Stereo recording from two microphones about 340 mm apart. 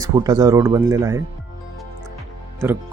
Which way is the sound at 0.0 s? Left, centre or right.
Centre.